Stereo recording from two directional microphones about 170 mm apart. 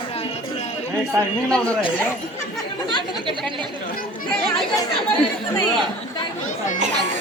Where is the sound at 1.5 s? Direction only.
5° left (ahead or behind).